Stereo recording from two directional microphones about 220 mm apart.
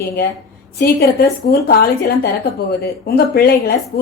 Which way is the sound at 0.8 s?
45° left (ahead or behind).